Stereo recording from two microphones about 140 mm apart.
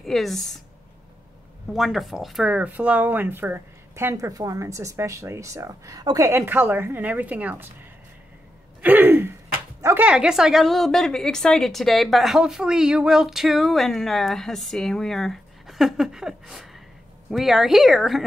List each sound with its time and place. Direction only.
0.0 s a woman's voice: centre (ahead or behind)
1.7 s speech: centre (ahead or behind)
8.8 s a sound: 15° right (ahead or behind)
9.9 s a woman's voice: 5° right (ahead or behind)